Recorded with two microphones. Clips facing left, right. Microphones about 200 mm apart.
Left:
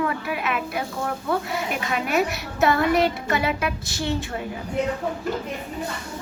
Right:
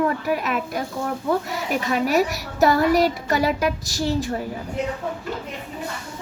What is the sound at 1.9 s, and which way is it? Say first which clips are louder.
A woman's voice: right 3 dB; 35° right (ahead or behind).